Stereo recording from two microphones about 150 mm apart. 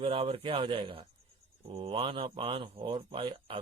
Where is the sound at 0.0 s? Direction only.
35° right (ahead or behind).